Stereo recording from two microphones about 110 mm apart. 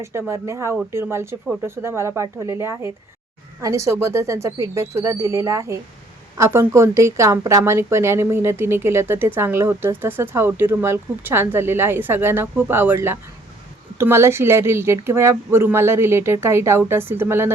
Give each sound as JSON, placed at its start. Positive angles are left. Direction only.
{"t": 0.0, "sound": "a woman's voice", "side_deg": -25}